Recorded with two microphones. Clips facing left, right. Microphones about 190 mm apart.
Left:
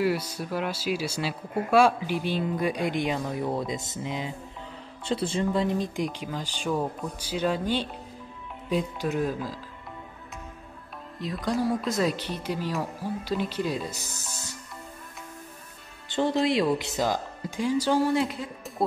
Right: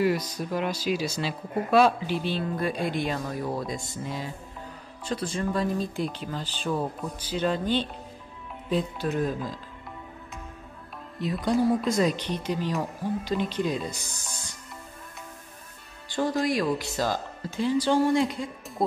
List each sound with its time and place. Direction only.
0.0 s speech: 10° left (ahead or behind)
11.1 s speech: centre (ahead or behind)
16.1 s speech: 25° left (ahead or behind); by 18.9 s 5° left (ahead or behind)